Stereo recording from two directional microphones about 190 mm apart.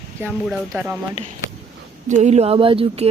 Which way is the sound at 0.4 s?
5° right (ahead or behind).